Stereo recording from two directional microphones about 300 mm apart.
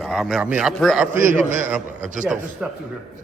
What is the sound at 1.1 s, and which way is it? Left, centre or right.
Speech, right.